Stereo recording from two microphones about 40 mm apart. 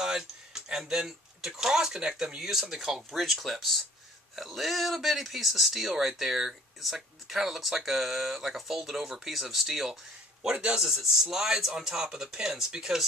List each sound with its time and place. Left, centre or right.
0.0 s speech: centre
10.4 s a man's voice: right
10.8 s speech: centre